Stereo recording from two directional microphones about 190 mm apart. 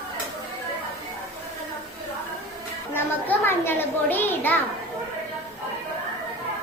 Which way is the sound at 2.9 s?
10° left (ahead or behind).